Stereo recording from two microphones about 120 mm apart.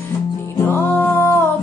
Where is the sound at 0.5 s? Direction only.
20° left (ahead or behind).